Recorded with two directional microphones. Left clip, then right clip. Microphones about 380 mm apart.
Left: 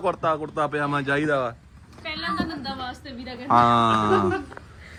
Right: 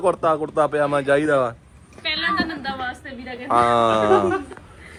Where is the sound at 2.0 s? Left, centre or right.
Centre.